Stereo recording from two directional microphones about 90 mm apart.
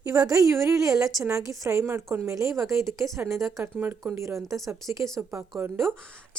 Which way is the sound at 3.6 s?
25° right (ahead or behind).